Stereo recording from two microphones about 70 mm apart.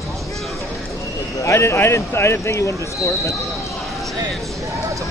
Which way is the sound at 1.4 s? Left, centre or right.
Left.